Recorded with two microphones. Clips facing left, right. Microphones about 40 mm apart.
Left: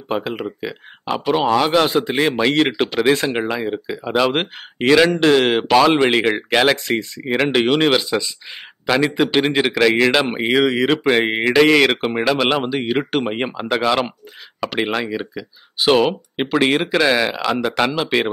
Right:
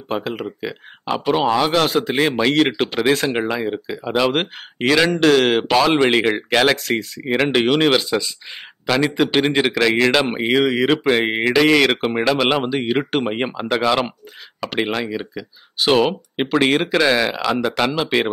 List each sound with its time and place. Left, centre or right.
0.1 s speech: centre
1.1 s speech: centre
1.6 s speech: centre
2.0 s speech: centre
2.5 s speech: centre
3.3 s speech: centre
5.2 s speech: centre